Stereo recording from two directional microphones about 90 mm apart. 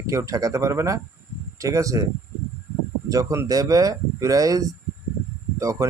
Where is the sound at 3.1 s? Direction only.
40° right (ahead or behind).